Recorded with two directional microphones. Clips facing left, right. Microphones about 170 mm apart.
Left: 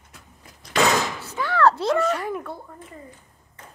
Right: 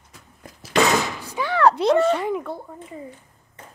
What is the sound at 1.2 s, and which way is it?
Door, 15° right (ahead or behind).